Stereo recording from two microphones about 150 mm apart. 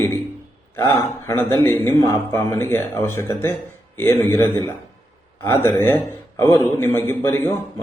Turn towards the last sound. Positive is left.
turn(degrees=15)  # may be behind; listen again after turning